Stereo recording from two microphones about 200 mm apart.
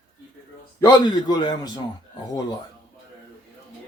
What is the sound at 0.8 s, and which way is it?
A man's voice, 20° left (ahead or behind).